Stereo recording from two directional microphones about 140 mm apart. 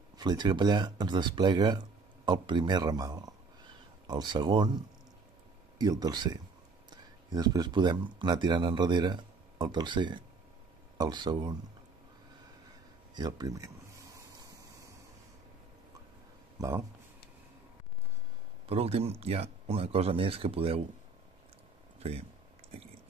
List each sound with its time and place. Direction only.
0.2 s speech: 30° right (ahead or behind)
13.1 s a sound: 30° right (ahead or behind)
16.5 s speech: 25° right (ahead or behind)
18.7 s speech: 45° right (ahead or behind)